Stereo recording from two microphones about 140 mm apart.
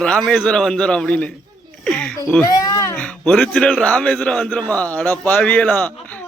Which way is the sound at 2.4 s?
25° left (ahead or behind).